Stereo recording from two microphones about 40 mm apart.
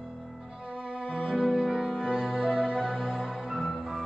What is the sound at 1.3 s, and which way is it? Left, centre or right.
Music, centre.